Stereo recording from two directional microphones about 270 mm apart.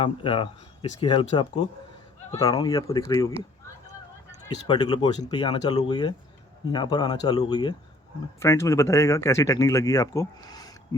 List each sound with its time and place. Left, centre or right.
0.0 s speech: centre
4.5 s speech: centre